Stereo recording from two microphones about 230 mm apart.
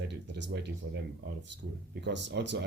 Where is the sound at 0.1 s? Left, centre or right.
Right.